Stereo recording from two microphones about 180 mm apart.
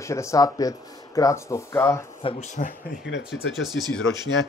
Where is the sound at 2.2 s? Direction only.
40° left (ahead or behind).